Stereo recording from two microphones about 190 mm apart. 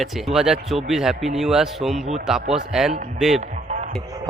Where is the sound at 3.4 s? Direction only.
40° right (ahead or behind).